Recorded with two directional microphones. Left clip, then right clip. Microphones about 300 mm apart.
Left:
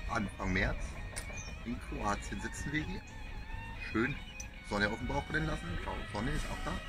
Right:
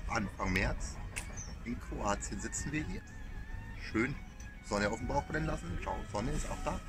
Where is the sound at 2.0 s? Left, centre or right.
Centre.